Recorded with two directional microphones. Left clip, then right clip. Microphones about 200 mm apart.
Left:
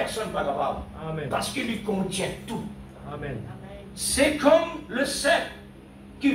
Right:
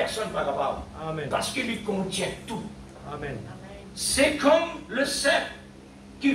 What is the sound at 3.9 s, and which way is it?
A man's voice, 55° left (ahead or behind).